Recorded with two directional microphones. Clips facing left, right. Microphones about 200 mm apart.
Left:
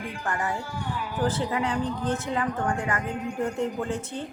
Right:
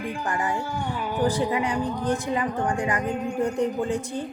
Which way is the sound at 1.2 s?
15° right (ahead or behind).